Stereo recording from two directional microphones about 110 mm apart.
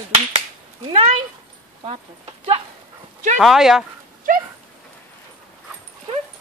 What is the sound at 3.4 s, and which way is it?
Speech, 5° right (ahead or behind).